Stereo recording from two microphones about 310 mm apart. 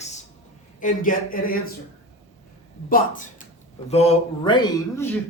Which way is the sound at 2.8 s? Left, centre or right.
Left.